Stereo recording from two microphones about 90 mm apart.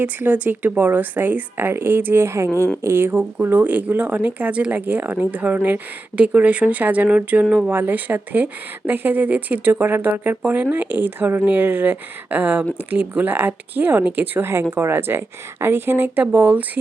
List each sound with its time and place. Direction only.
0.0 s speech: 20° right (ahead or behind)